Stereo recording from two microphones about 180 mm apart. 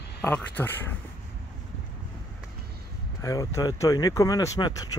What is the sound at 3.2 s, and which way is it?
Speech, 20° left (ahead or behind).